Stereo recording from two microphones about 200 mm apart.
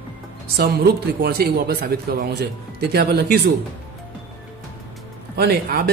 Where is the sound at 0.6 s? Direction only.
50° right (ahead or behind).